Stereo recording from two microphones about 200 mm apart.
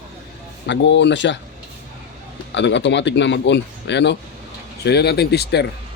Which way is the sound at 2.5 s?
60° left (ahead or behind).